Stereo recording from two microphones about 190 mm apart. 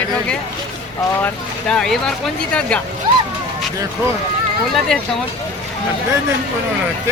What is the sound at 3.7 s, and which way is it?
Speech, 15° right (ahead or behind).